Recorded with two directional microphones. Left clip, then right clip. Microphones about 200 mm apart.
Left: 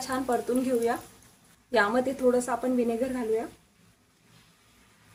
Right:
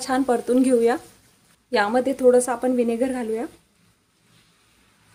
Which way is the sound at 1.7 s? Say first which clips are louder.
Right 4 dB; 30° right (ahead or behind).